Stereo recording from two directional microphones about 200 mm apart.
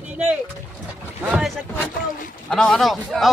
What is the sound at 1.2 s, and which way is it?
Boat, 5° right (ahead or behind).